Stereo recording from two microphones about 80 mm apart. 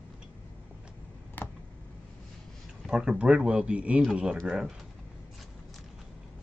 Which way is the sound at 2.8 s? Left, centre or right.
Centre.